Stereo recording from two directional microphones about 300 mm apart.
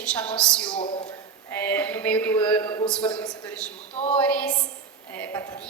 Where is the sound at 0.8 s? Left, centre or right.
Centre.